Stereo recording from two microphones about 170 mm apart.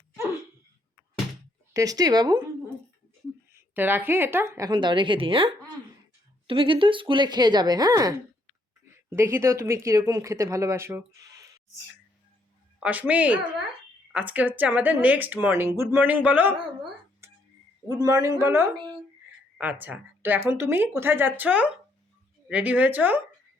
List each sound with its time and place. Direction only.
1.7 s speech: 20° right (ahead or behind)
3.5 s speech: 10° right (ahead or behind)
12.8 s speech: 10° right (ahead or behind)
17.2 s a sound: 15° right (ahead or behind)
18.0 s speech: 20° right (ahead or behind)